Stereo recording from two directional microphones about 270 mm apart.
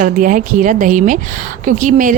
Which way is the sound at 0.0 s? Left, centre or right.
Right.